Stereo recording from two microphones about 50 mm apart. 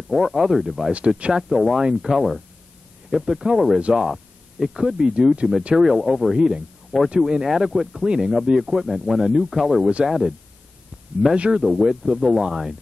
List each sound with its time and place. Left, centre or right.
0.1 s speech: centre
0.9 s speech: right
1.3 s speech: centre
5.8 s speech: centre
6.3 s speech: centre
11.5 s speech: centre